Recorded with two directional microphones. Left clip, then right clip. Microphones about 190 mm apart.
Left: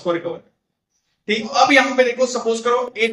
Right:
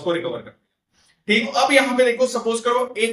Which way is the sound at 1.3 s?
15° left (ahead or behind).